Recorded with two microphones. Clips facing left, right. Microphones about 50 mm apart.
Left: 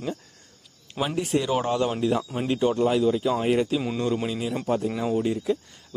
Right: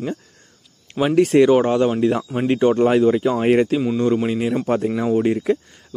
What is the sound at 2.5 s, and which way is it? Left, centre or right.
Speech, right.